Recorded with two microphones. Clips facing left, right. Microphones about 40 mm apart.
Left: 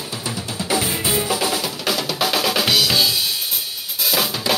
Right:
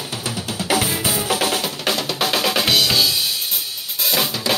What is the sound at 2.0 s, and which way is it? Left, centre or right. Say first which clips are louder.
Drum: left 1 dB; centre.